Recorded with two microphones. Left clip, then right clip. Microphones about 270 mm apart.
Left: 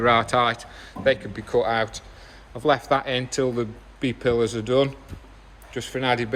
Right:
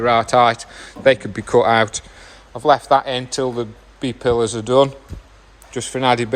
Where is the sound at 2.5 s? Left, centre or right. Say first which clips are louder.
Right 7 dB; centre.